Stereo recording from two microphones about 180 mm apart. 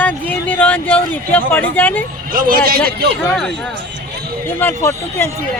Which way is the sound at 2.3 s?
50° right (ahead or behind).